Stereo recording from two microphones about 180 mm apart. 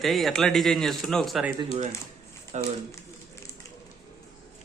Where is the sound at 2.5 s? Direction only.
40° right (ahead or behind).